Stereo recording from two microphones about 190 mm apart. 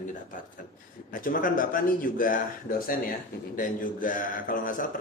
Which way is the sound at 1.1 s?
45° left (ahead or behind).